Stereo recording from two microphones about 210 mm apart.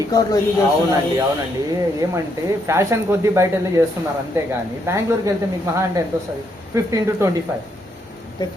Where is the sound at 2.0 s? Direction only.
10° right (ahead or behind).